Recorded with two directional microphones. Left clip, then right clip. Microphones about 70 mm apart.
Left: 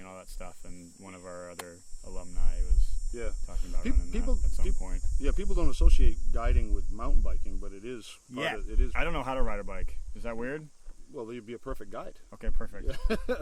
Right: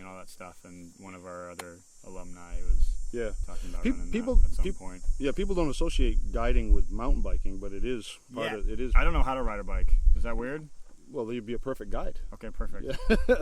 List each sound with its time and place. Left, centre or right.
0.0 s speech: centre
3.5 s speech: right
4.8 s speech: centre
5.2 s speech: right
8.9 s speech: centre
11.1 s speech: right
12.3 s speech: centre
12.9 s speech: right